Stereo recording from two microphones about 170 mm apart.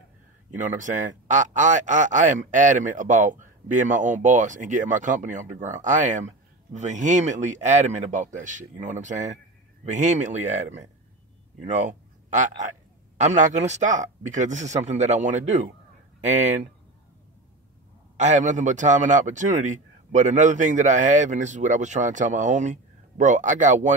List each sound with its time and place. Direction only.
0.6 s speech: 50° right (ahead or behind)
18.1 s speech: 45° right (ahead or behind)